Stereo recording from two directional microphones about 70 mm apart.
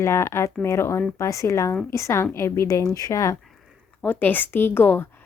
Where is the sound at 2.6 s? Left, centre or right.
Left.